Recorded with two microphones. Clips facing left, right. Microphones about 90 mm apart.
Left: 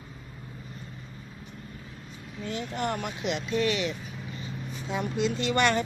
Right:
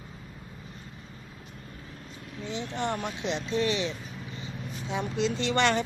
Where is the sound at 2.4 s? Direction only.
25° right (ahead or behind).